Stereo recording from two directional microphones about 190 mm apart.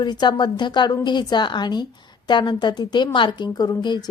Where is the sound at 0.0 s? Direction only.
20° left (ahead or behind).